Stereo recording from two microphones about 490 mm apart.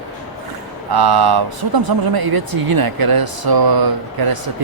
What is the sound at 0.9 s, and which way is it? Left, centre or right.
Speech, right.